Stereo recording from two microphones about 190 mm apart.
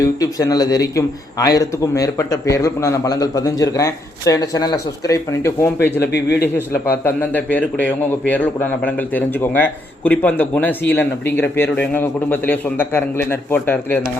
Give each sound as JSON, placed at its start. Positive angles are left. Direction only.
{"t": 0.0, "sound": "a man's voice", "side_deg": 20}